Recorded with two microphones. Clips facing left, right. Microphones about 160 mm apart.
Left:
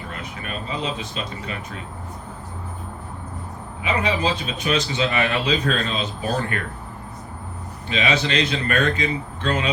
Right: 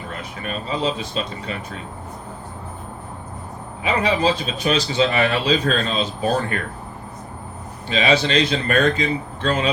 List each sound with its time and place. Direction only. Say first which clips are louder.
0.4 s a man's voice: right 5 dB; 35° right (ahead or behind)
3.8 s a man's voice: right 3 dB; 35° right (ahead or behind)
7.9 s a man's voice: right 4 dB; 30° right (ahead or behind)